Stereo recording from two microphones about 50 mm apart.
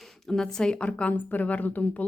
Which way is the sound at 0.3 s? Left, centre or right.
Centre.